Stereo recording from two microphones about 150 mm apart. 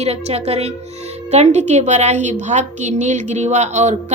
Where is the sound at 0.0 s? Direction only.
45° right (ahead or behind).